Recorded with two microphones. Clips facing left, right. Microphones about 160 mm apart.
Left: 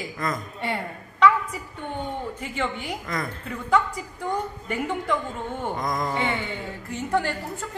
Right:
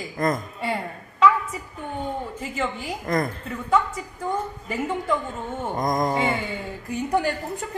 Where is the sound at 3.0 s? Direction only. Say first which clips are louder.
Right 9 dB; 45° right (ahead or behind).